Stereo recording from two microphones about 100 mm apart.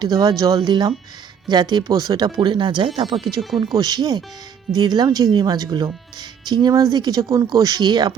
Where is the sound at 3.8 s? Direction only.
40° right (ahead or behind).